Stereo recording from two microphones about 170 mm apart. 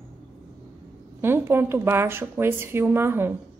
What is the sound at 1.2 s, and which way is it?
A woman's voice, 15° right (ahead or behind).